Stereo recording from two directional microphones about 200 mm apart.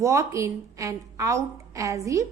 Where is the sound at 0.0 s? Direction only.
15° right (ahead or behind).